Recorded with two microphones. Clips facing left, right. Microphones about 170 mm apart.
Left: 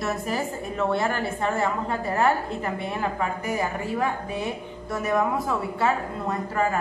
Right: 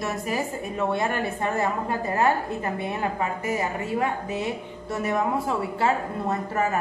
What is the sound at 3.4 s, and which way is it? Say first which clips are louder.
A woman's voice: even; 25° right (ahead or behind).